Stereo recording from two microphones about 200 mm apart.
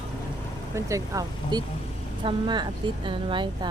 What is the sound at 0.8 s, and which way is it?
Speech, 15° right (ahead or behind).